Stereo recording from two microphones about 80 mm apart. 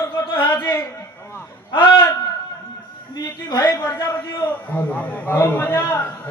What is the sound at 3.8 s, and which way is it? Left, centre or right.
A man's voice, left.